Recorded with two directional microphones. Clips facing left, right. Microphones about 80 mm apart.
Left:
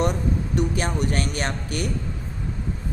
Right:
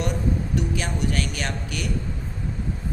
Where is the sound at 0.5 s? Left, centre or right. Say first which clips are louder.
Left 3 dB; left.